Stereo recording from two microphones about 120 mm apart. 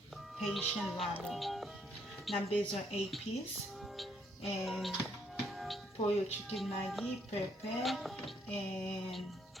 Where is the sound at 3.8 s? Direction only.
Centre (ahead or behind).